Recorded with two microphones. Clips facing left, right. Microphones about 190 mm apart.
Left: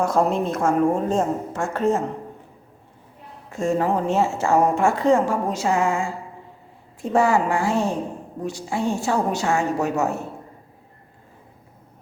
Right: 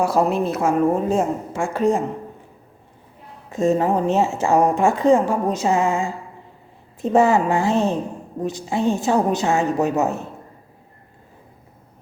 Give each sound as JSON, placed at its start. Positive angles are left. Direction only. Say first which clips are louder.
{"t": 0.0, "sound": "a woman's voice", "louder": "right 2 dB", "side_deg": -5}
{"t": 3.5, "sound": "a woman's voice", "louder": "right 3 dB", "side_deg": -20}